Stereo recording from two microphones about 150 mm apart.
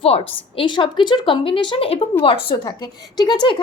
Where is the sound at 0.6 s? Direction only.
35° left (ahead or behind).